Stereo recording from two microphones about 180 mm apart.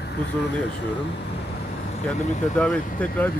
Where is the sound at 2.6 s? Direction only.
5° left (ahead or behind).